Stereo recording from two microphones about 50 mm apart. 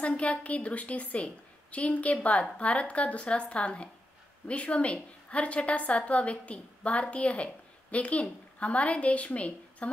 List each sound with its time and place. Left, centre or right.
0.0 s a woman's voice: left